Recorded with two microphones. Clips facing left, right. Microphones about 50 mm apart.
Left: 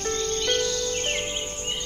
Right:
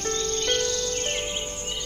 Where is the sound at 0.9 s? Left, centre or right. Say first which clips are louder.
Left 1 dB; left.